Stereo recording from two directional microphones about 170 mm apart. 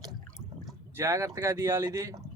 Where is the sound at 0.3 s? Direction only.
Centre (ahead or behind).